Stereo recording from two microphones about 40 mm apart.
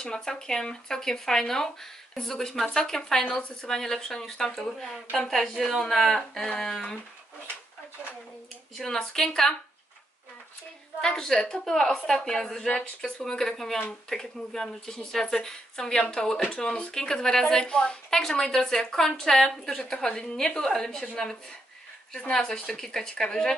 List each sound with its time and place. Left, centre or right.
0.0 s a woman's voice: centre
8.7 s a woman's voice: centre
11.0 s a woman's voice: centre
11.6 s a woman's voice: centre
12.6 s speech: left
13.3 s a woman's voice: centre
19.8 s a woman's voice: left
22.4 s a woman's voice: centre